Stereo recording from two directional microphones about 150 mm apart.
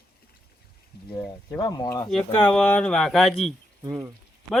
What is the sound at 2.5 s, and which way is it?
Speech, 5° left (ahead or behind).